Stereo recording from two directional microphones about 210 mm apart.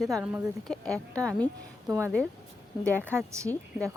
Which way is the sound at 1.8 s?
15° right (ahead or behind).